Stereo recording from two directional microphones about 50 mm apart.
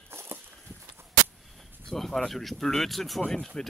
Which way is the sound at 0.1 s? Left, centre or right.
Right.